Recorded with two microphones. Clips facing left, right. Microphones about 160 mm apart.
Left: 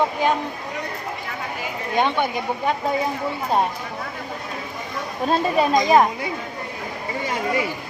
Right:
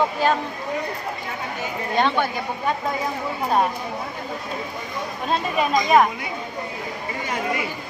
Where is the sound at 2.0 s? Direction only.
20° left (ahead or behind).